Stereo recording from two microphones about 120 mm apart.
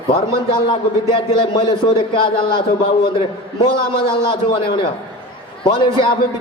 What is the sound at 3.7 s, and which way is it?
A man's voice, 45° left (ahead or behind).